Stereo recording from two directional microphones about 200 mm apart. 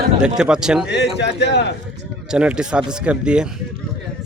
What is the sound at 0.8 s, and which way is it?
Speech, 60° left (ahead or behind).